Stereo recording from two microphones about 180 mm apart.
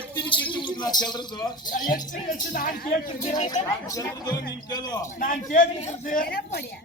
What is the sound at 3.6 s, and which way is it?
Speech, 20° left (ahead or behind).